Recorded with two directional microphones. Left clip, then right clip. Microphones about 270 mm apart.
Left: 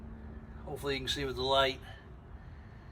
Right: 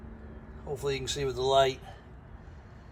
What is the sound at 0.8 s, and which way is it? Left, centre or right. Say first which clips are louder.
Speech: right 3 dB; centre.